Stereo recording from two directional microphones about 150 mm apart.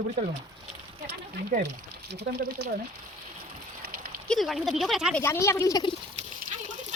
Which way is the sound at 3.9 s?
90° right.